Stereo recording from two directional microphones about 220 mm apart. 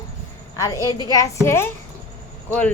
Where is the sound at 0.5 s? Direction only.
15° left (ahead or behind).